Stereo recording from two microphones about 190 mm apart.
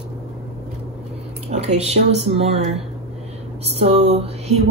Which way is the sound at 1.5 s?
35° right (ahead or behind).